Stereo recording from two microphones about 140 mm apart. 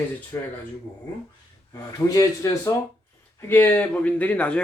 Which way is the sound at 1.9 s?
25° left (ahead or behind).